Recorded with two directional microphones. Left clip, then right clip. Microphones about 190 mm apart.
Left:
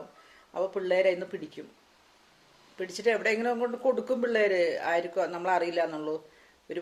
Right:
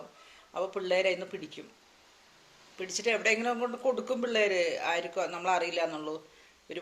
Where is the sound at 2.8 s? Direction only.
35° left (ahead or behind).